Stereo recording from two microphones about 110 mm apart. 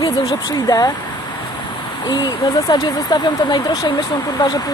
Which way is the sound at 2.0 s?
40° left (ahead or behind).